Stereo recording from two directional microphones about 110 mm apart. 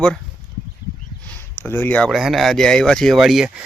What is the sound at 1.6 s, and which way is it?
Speech, 15° left (ahead or behind).